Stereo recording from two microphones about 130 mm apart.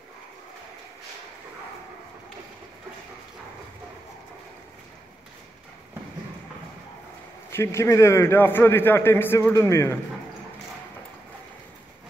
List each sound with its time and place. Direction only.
7.5 s a man's voice: 20° left (ahead or behind)